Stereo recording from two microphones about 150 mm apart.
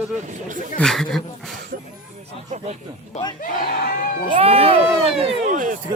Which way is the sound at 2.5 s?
50° right (ahead or behind).